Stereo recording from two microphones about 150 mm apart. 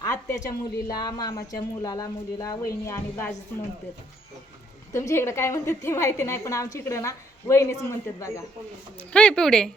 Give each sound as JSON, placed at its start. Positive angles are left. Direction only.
{"t": 0.0, "sound": "a sound", "side_deg": 20}
{"t": 0.9, "sound": "speech", "side_deg": 25}
{"t": 4.9, "sound": "speech", "side_deg": 20}
{"t": 9.1, "sound": "speech", "side_deg": 5}